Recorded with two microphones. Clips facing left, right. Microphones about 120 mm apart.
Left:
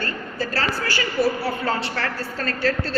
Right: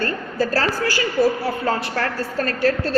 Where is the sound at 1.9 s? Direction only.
45° right (ahead or behind).